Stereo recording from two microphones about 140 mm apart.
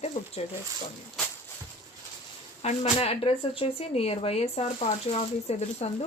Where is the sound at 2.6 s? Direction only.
50° left (ahead or behind).